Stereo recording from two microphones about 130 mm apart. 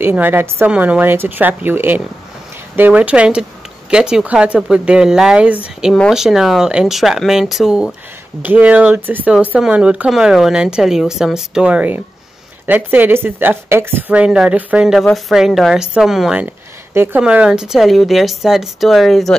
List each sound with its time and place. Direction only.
0.0 s a woman's voice: 15° right (ahead or behind)
16.9 s a woman's voice: 15° right (ahead or behind); by 19.3 s centre (ahead or behind)